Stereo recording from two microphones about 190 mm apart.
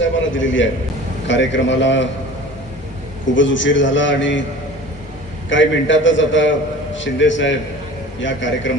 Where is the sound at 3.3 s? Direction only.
80° left.